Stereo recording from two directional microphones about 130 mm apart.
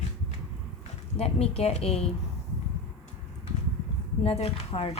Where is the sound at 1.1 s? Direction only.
50° left (ahead or behind).